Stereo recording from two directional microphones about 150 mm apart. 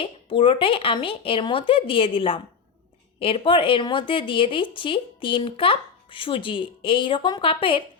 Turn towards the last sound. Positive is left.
turn(degrees=35)  # may be behind; listen again after turning